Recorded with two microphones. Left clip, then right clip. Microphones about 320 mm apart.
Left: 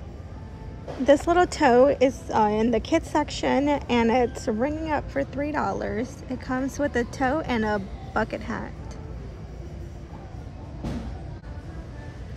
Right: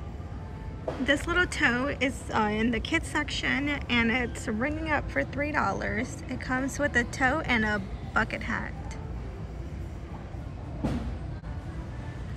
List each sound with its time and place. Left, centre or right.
1.0 s a woman's voice: centre